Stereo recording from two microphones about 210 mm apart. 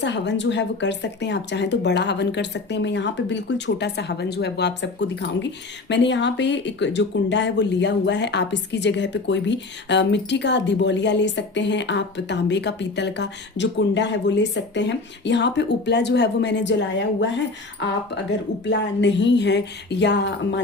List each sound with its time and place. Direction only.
0.0 s speech: 55° left (ahead or behind)